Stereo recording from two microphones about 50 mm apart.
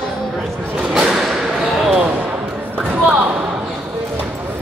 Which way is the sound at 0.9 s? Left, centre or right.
Centre.